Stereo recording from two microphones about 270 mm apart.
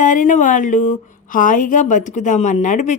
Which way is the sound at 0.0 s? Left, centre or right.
Left.